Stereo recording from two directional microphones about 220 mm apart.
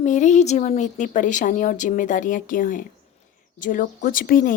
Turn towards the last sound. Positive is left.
turn(degrees=40)  # may be behind; listen again after turning